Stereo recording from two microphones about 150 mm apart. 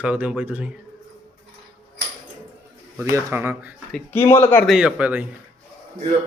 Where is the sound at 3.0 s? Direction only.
20° right (ahead or behind).